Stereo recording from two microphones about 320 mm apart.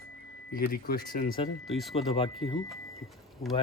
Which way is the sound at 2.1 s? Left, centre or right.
Centre.